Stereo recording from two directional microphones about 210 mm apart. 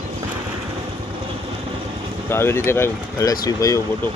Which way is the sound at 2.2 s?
10° left (ahead or behind).